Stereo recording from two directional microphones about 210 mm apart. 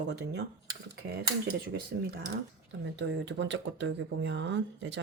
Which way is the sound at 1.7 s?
50° right (ahead or behind).